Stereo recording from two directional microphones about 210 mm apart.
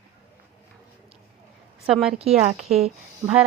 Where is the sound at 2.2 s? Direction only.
30° right (ahead or behind).